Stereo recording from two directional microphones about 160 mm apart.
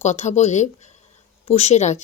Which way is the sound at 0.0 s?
45° left (ahead or behind).